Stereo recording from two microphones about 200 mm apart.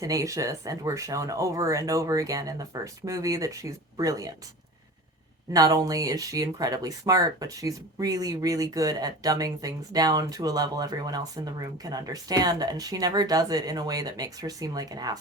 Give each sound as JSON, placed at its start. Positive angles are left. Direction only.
{"t": 0.0, "sound": "speech", "side_deg": -15}
{"t": 5.5, "sound": "speech", "side_deg": -15}